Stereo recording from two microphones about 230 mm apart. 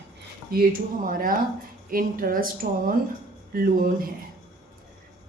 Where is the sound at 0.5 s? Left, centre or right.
Right.